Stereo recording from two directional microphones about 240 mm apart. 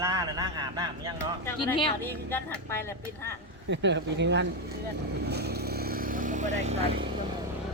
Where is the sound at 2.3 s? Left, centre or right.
Centre.